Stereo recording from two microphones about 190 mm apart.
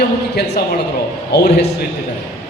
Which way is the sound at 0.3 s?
60° left (ahead or behind).